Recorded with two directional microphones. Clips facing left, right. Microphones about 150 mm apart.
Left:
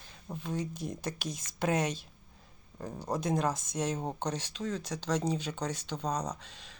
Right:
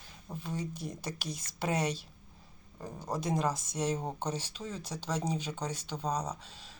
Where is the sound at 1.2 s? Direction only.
50° left (ahead or behind).